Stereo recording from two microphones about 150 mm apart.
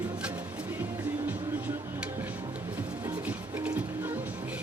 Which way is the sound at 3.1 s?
10° right (ahead or behind).